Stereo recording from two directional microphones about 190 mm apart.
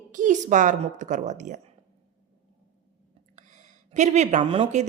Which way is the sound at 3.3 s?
40° right (ahead or behind).